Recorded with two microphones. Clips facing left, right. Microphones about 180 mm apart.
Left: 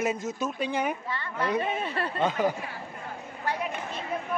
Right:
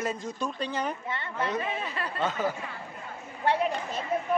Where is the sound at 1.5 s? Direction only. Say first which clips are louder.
Left 3 dB; 30° left (ahead or behind).